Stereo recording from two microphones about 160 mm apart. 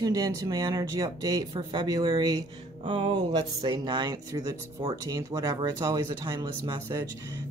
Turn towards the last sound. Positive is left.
turn(degrees=-20)  # may be behind; listen again after turning